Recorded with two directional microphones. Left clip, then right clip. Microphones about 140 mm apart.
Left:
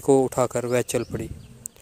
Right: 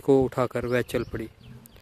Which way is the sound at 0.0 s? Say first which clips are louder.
Left 2 dB; centre (ahead or behind).